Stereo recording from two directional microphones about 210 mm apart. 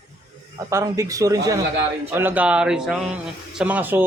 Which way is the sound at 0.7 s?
15° right (ahead or behind).